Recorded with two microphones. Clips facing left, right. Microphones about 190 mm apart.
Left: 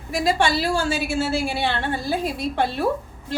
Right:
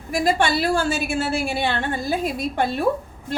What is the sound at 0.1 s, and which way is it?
A woman's voice, 50° right (ahead or behind).